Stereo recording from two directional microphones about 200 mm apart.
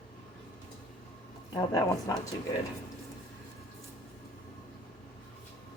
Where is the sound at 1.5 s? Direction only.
15° left (ahead or behind).